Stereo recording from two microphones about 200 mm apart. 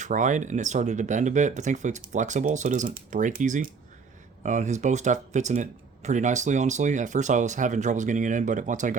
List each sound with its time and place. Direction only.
0.0 s speech: 40° right (ahead or behind)